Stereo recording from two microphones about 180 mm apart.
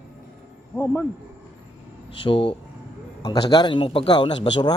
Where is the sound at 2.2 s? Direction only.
30° left (ahead or behind).